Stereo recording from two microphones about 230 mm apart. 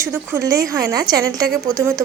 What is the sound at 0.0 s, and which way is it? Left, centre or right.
A woman's voice, centre.